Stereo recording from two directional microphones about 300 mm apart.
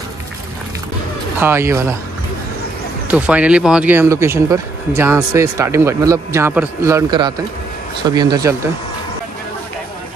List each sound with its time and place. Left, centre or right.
1.4 s speech: centre
3.1 s speech: centre